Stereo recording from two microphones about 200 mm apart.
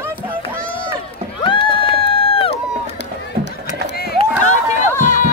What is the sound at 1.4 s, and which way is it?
Crowd, 25° left (ahead or behind).